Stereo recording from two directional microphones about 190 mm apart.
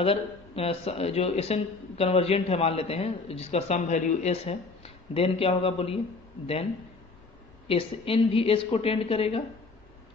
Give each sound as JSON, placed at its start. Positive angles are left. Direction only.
{"t": 0.0, "sound": "speech", "side_deg": 30}
{"t": 7.6, "sound": "speech", "side_deg": 30}